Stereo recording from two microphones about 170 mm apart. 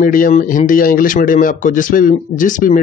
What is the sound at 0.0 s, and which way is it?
Speech, 55° left (ahead or behind).